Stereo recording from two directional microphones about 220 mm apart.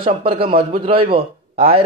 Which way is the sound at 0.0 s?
25° right (ahead or behind).